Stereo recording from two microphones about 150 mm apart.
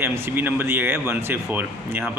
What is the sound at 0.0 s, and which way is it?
Speech, 15° right (ahead or behind).